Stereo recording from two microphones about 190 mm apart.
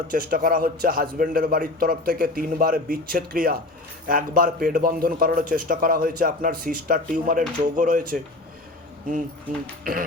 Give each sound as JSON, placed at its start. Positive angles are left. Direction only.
{"t": 0.1, "sound": "a man's voice", "side_deg": -45}